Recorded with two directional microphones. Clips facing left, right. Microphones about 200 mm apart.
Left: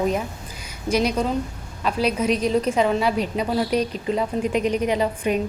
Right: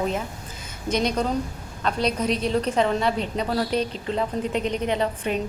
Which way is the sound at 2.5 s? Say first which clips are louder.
Left 2 dB; 10° left (ahead or behind).